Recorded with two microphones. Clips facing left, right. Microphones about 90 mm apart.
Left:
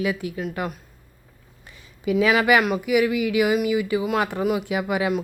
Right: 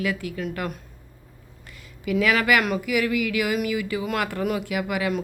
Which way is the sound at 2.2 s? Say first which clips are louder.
Left 3 dB; 20° left (ahead or behind).